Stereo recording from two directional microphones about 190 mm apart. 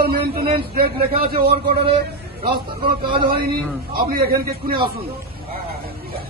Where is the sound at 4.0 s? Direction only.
50° right (ahead or behind).